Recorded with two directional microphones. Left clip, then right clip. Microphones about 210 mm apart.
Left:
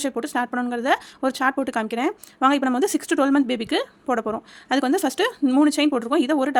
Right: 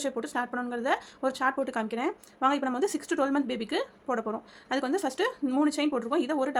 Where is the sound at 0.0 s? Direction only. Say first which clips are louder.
Left 6 dB; 45° left (ahead or behind).